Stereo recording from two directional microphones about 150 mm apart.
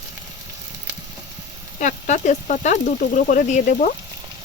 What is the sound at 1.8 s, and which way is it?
Speech, 55° left (ahead or behind).